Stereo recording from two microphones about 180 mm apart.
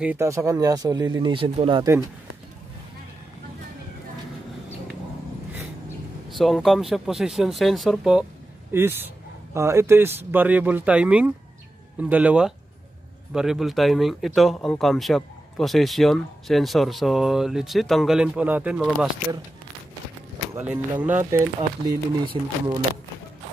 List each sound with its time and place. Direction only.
0.0 s speech: 10° right (ahead or behind); by 1.9 s 30° right (ahead or behind)
6.3 s speech: centre (ahead or behind)
8.7 s a man's voice: 15° right (ahead or behind)
20.5 s a man's voice: 10° right (ahead or behind)
21.8 s speech: 30° right (ahead or behind)